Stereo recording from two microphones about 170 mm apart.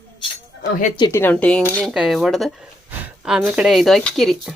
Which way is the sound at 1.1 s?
10° left (ahead or behind).